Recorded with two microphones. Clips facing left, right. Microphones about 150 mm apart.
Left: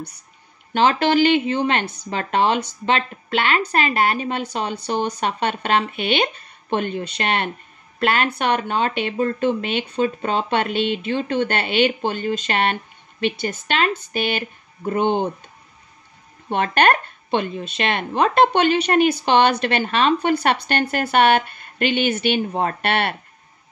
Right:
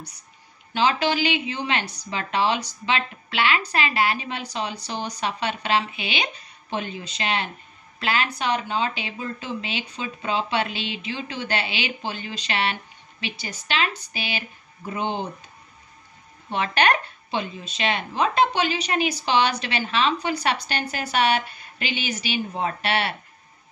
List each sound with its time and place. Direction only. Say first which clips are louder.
0.7 s speech: left 5 dB; 55° left (ahead or behind)
16.4 s speech: left 4 dB; 55° left (ahead or behind)